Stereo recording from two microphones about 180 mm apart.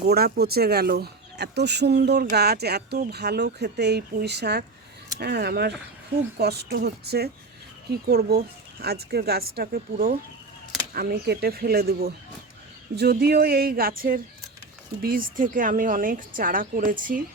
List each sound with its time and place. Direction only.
0.1 s a woman's voice: 60° right (ahead or behind)